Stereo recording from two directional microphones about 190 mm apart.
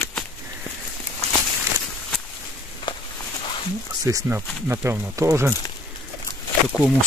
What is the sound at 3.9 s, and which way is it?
Speech, 20° right (ahead or behind).